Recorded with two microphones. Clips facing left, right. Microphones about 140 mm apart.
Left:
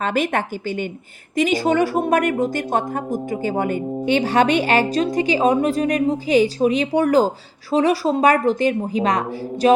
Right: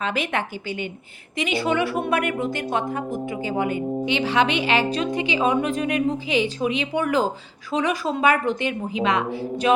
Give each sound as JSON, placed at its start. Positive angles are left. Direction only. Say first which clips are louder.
{"t": 0.0, "sound": "a woman's voice", "louder": "left 5 dB", "side_deg": 45}